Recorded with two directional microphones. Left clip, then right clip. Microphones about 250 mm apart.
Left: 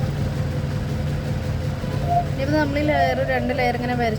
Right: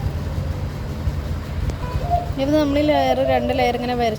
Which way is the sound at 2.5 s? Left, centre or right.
Centre.